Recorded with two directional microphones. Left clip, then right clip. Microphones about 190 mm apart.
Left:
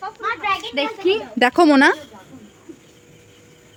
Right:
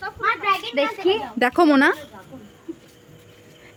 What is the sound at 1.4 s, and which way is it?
Speech, 15° left (ahead or behind).